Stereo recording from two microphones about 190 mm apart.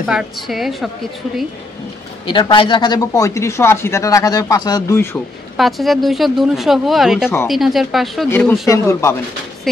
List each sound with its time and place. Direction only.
0.0 s speech: centre (ahead or behind)
2.2 s speech: 25° left (ahead or behind)
5.6 s speech: centre (ahead or behind)
8.3 s speech: 10° left (ahead or behind)